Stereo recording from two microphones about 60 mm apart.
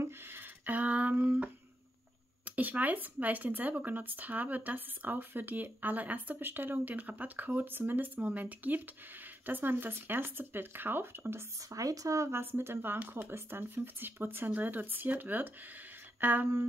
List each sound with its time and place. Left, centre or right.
0.0 s a sound: right
2.4 s speech: right
11.7 s speech: right
12.3 s speech: right